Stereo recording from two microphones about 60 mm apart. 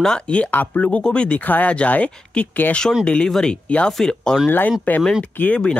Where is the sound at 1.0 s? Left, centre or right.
Centre.